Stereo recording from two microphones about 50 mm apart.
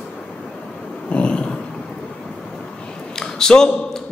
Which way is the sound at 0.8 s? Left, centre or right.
Left.